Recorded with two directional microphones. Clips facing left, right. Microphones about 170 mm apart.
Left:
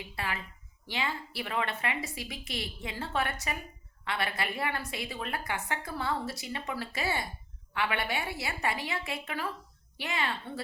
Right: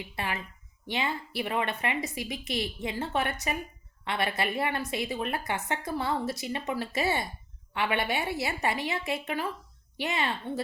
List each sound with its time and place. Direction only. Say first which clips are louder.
0.2 s a woman's voice: right 2 dB; 20° right (ahead or behind)